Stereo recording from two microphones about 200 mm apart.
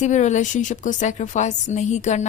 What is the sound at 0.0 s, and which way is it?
A woman's voice, 35° left (ahead or behind).